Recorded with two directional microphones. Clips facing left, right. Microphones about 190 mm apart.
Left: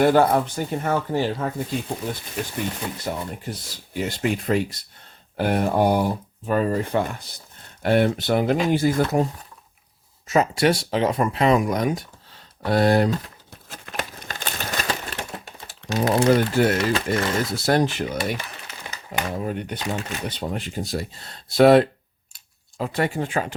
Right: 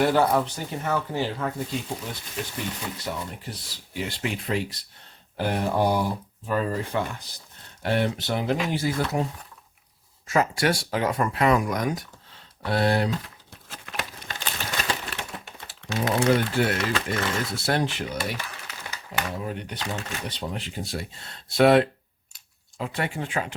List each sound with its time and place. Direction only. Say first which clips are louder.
0.0 s speech: left 4 dB; 50° left (ahead or behind)
3.0 s speech: left 4 dB; 45° left (ahead or behind)
5.4 s speech: left 4 dB; 60° left (ahead or behind)
10.2 s speech: left 4 dB; 20° left (ahead or behind)
12.3 s crumpling: left 5 dB; 40° left (ahead or behind)
19.5 s speech: left 5 dB; 50° left (ahead or behind)